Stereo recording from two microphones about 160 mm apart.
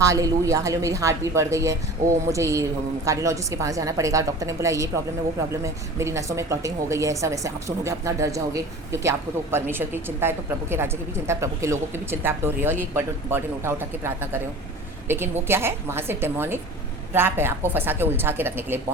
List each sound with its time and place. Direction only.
0.0 s a woman's voice: 20° right (ahead or behind)